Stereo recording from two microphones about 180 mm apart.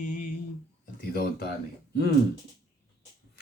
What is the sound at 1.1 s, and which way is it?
Speech, 60° left (ahead or behind).